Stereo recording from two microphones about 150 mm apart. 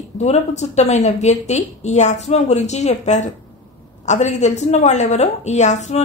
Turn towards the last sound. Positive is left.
turn(degrees=50)  # may be behind; listen again after turning